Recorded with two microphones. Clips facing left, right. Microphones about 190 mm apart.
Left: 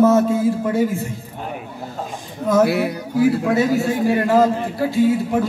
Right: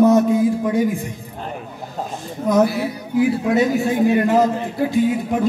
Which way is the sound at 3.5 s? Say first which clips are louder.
Right 1 dB; 20° right (ahead or behind).